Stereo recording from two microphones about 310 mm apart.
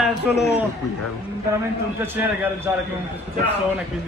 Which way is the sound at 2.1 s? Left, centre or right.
Centre.